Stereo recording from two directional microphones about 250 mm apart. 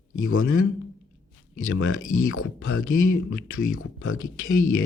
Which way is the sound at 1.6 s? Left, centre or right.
Left.